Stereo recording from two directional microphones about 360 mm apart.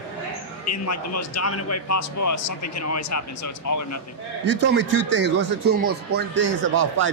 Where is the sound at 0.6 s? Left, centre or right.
Left.